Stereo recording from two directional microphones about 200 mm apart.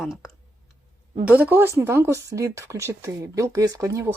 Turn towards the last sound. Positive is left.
turn(degrees=-15)  # may be behind; listen again after turning